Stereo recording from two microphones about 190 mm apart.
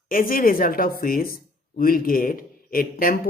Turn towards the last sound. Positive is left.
turn(degrees=50)  # may be behind; listen again after turning